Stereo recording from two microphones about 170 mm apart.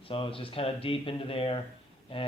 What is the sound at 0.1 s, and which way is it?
Speech, 30° left (ahead or behind).